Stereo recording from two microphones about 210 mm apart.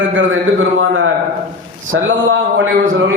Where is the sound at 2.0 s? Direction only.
65° right (ahead or behind).